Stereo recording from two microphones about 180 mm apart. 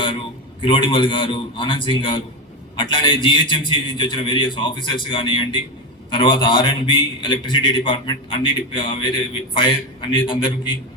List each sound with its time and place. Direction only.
0.6 s a man's voice: 30° left (ahead or behind)